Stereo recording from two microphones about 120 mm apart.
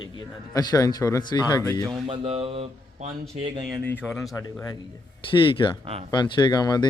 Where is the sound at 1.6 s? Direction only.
10° left (ahead or behind).